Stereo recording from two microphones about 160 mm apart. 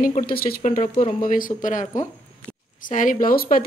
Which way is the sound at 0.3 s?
70° left (ahead or behind).